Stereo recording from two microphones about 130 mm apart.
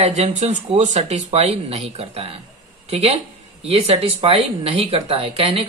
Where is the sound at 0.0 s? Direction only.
65° right (ahead or behind).